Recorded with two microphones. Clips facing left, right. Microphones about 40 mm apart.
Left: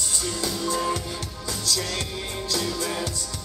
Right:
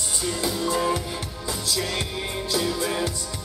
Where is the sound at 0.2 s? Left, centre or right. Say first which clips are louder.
Right 4 dB; centre.